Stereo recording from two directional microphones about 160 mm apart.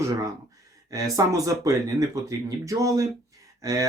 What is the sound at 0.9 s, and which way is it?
Speech, 20° right (ahead or behind).